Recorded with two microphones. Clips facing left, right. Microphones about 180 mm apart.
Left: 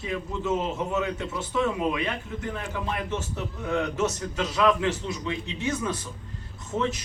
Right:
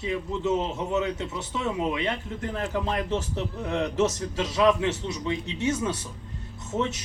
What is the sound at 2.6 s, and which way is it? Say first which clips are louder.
A man's voice: right 7 dB; 35° right (ahead or behind).